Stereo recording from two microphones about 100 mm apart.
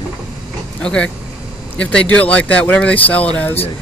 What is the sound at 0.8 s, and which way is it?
Speech, 10° left (ahead or behind).